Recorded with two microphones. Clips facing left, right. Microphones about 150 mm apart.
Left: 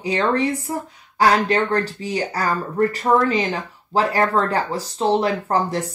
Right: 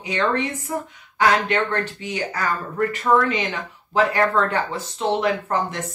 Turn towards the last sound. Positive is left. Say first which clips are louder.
# left 3 dB
turn(degrees=35)  # may be behind; listen again after turning